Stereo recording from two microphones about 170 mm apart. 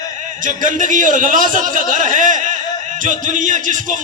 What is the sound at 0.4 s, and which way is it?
A man's voice, 50° right (ahead or behind).